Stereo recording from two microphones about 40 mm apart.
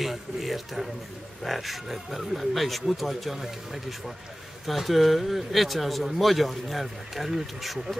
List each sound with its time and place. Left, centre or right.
0.0 s speech: centre